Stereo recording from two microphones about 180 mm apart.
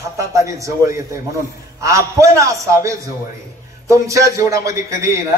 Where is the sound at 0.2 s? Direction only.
15° right (ahead or behind).